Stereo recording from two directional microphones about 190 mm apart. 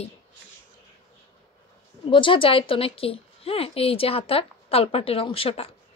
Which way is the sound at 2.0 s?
25° left (ahead or behind).